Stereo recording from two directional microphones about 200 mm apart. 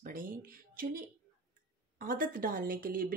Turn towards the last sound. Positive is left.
turn(degrees=-45)  # may be behind; listen again after turning